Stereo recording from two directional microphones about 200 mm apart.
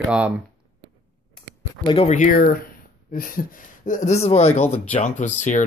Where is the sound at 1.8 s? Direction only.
25° left (ahead or behind).